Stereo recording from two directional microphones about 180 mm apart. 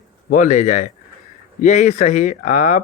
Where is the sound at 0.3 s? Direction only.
45° left (ahead or behind).